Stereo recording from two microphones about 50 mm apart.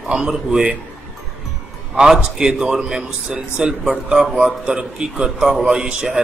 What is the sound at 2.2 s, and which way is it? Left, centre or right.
A man's voice, centre.